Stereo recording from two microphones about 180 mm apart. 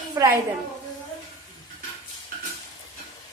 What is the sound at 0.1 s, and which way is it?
Speech, 15° right (ahead or behind).